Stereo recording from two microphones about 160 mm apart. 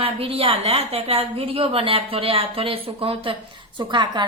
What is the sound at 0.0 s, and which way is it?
A woman's voice, 35° right (ahead or behind).